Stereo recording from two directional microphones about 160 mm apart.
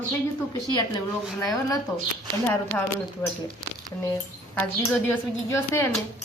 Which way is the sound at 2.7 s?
10° left (ahead or behind).